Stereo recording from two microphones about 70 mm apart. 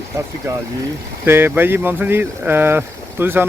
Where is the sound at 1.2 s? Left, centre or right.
Right.